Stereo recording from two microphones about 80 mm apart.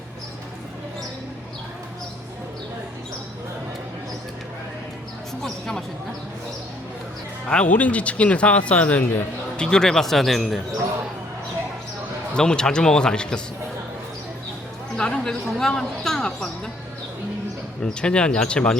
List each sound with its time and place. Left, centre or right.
5.4 s speech: centre
7.4 s speech: centre
9.6 s speech: centre
12.3 s speech: centre
14.9 s speech: centre
17.8 s speech: centre